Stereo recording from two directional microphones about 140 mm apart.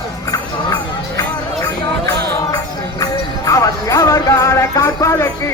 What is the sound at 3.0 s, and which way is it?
Music, 25° left (ahead or behind).